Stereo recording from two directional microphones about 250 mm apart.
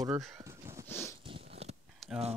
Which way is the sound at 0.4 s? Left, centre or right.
Centre.